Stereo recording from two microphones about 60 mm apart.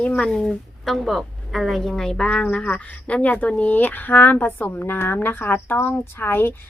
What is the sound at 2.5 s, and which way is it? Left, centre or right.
Speech, left.